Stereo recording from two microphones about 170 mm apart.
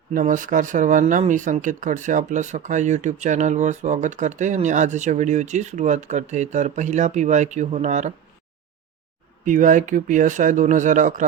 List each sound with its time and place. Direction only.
0.1 s speech: 50° right (ahead or behind)
9.4 s speech: 50° right (ahead or behind)